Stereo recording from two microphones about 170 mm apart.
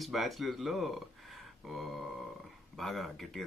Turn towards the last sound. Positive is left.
turn(degrees=0)  # may be behind; listen again after turning